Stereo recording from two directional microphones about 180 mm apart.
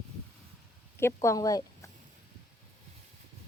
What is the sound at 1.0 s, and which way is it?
Speech, 15° left (ahead or behind).